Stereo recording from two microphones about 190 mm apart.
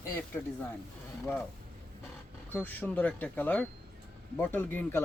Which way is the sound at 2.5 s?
10° left (ahead or behind).